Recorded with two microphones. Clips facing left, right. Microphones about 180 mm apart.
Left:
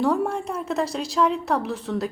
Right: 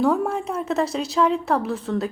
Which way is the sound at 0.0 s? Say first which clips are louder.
Right 2 dB; centre (ahead or behind).